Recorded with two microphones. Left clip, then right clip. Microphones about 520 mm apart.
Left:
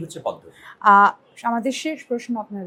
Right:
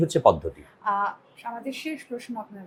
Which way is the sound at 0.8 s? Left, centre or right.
Left.